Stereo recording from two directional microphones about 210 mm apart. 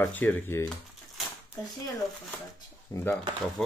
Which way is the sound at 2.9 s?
15° left (ahead or behind).